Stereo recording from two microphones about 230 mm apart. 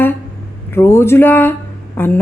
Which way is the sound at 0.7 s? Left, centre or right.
Centre.